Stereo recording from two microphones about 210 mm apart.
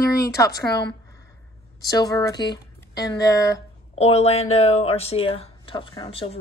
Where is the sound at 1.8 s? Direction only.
20° left (ahead or behind).